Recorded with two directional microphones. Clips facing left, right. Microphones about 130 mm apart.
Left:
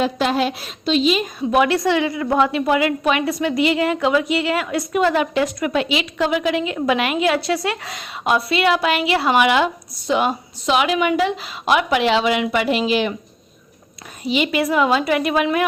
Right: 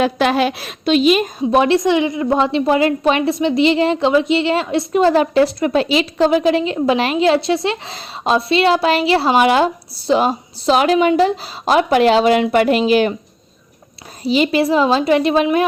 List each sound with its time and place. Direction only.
0.0 s a woman's voice: 70° right (ahead or behind)
1.4 s a woman's voice: 30° right (ahead or behind); by 13.1 s 45° right (ahead or behind)
14.3 s a woman's voice: 35° right (ahead or behind)